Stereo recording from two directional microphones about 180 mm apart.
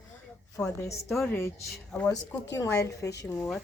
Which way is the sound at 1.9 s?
10° left (ahead or behind).